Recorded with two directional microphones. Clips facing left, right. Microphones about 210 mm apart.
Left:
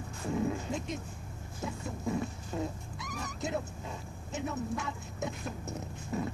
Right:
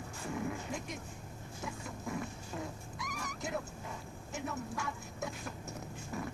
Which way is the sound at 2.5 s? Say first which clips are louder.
Left 6 dB; 25° left (ahead or behind).